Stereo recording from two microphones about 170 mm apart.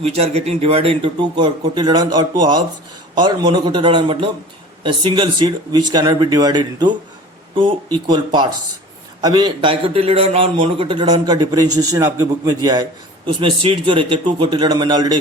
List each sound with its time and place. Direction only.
0.0 s a man's voice: 35° right (ahead or behind); by 12.8 s 20° right (ahead or behind)
13.2 s a man's voice: 30° right (ahead or behind)